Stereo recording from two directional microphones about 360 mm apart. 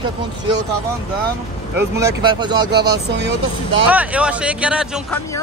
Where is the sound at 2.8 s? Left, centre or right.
Right.